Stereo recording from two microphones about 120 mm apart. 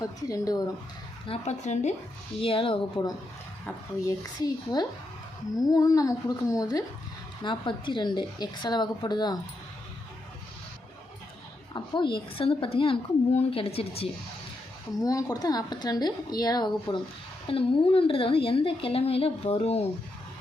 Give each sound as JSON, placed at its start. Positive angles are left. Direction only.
{"t": 0.0, "sound": "speech", "side_deg": 30}
{"t": 1.3, "sound": "speech", "side_deg": 70}
{"t": 2.4, "sound": "a woman's voice", "side_deg": 50}
{"t": 4.0, "sound": "speech", "side_deg": 30}
{"t": 7.4, "sound": "speech", "side_deg": 40}
{"t": 11.7, "sound": "a woman's voice", "side_deg": 40}
{"t": 15.0, "sound": "speech", "side_deg": 30}
{"t": 17.4, "sound": "a woman's voice", "side_deg": 50}